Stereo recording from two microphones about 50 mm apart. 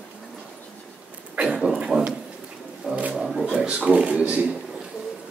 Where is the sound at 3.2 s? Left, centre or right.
Centre.